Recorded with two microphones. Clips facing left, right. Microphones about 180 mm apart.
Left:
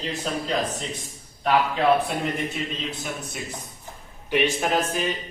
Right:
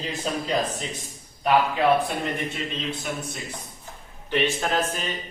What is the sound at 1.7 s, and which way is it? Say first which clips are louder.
Speech: even; centre (ahead or behind).